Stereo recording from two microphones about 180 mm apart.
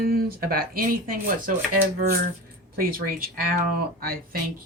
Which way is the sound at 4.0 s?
55° right (ahead or behind).